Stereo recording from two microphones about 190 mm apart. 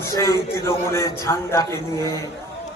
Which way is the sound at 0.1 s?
15° left (ahead or behind).